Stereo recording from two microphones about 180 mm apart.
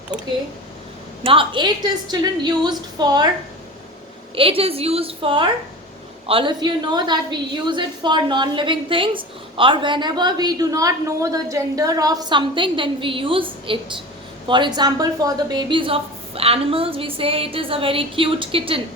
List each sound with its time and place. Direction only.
1.2 s a woman's voice: 30° right (ahead or behind)
4.4 s a woman's voice: 30° right (ahead or behind)